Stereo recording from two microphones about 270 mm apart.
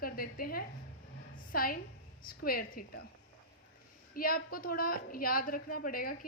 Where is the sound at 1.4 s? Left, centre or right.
Left.